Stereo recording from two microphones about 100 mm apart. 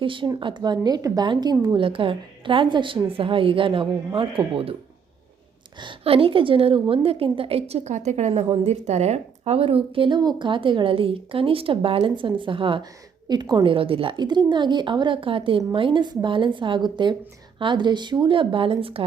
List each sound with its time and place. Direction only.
0.0 s a woman's voice: 55° right (ahead or behind)
1.8 s a woman's voice: 60° right (ahead or behind)
5.8 s a woman's voice: 65° right (ahead or behind)
10.2 s a woman's voice: 50° right (ahead or behind)
13.2 s a woman's voice: 45° right (ahead or behind); by 19.0 s 65° right (ahead or behind)